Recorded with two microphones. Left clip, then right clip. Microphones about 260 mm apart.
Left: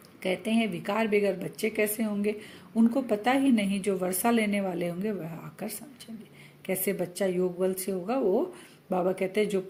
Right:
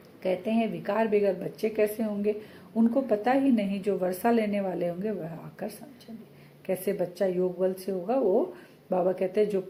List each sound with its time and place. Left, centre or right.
0.2 s a woman's voice: left